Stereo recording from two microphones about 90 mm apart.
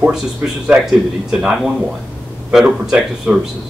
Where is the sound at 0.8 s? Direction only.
5° right (ahead or behind).